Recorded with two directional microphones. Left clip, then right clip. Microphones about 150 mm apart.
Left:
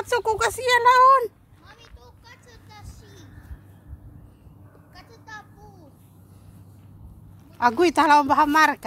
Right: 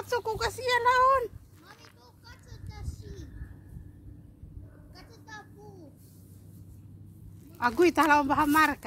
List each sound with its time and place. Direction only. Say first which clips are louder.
0.0 s speech: left 8 dB; 60° left (ahead or behind); by 1.3 s 45° left (ahead or behind)
2.2 s a sound: left 3 dB; 25° left (ahead or behind)
4.9 s vehicle: left 5 dB; 25° left (ahead or behind)
7.5 s speech: left 5 dB; 50° left (ahead or behind)